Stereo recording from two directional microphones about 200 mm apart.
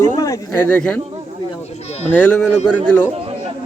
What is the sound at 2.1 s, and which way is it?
Speech, 5° left (ahead or behind).